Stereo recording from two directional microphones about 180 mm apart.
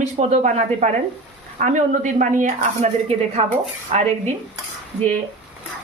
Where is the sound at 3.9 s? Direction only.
35° right (ahead or behind).